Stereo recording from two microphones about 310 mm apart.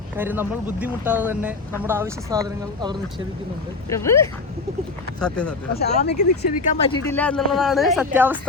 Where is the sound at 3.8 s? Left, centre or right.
Centre.